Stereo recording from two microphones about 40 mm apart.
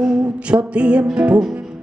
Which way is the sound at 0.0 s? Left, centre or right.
Centre.